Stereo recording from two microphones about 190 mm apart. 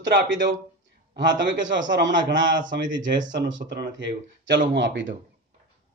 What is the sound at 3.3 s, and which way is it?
Speech, 70° right (ahead or behind).